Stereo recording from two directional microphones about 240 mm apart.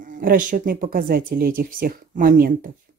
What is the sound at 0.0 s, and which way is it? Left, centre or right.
Speech, right.